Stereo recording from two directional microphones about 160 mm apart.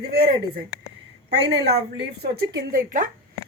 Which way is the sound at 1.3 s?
90° right.